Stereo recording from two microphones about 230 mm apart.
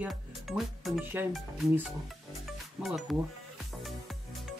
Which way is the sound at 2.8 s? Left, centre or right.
Centre.